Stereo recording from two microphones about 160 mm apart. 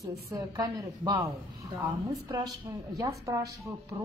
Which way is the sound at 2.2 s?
25° right (ahead or behind).